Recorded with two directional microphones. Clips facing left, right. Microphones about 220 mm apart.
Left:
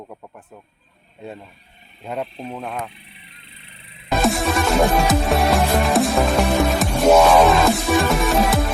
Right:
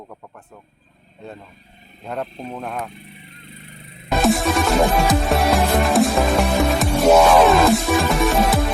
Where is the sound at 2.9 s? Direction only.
45° right (ahead or behind).